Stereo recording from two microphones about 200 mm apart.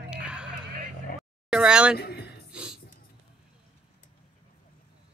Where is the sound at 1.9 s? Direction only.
50° left (ahead or behind).